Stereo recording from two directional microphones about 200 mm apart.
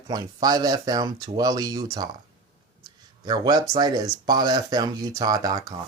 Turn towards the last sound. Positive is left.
turn(degrees=-20)  # may be behind; listen again after turning